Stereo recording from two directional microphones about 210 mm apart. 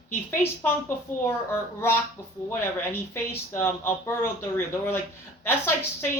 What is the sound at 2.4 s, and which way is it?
A woman's voice, 10° left (ahead or behind).